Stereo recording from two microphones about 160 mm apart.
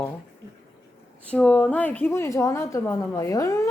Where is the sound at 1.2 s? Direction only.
10° left (ahead or behind).